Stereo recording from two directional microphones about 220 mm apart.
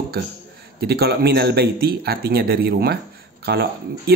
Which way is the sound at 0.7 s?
45° right (ahead or behind).